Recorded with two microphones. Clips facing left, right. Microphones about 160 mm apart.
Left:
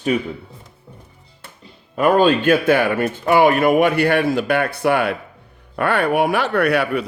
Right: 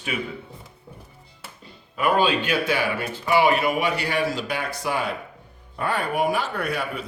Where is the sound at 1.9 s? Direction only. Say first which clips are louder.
Left 7 dB; 45° left (ahead or behind).